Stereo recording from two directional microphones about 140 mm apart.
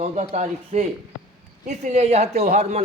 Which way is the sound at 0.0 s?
55° right (ahead or behind).